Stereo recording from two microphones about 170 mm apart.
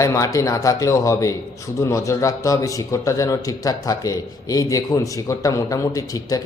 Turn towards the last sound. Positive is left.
turn(degrees=20)  # may be behind; listen again after turning